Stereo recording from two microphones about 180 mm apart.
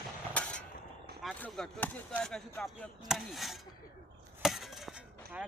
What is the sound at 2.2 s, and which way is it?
Speech, 5° left (ahead or behind).